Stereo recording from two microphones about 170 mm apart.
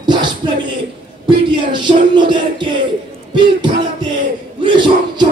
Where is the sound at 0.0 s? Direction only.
25° right (ahead or behind).